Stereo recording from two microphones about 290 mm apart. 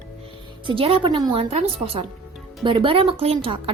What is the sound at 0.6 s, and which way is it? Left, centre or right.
A woman's voice, centre.